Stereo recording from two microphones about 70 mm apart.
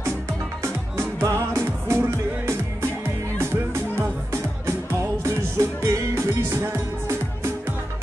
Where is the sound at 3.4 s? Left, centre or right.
Right.